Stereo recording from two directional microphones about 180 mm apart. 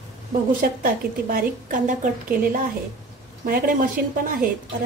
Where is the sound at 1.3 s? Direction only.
45° right (ahead or behind).